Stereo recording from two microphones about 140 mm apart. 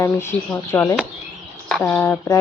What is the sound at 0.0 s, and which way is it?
Speech, 20° left (ahead or behind).